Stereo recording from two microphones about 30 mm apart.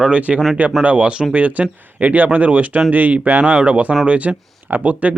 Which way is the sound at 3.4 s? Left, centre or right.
Right.